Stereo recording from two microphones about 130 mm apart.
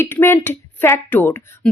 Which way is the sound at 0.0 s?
20° left (ahead or behind).